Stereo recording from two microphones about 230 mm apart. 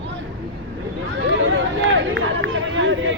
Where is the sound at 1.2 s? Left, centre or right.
Right.